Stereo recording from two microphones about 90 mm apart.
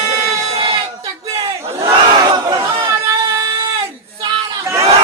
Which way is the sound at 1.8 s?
50° right (ahead or behind).